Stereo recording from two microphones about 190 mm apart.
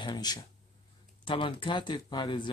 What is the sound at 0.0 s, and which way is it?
Speech, 20° left (ahead or behind).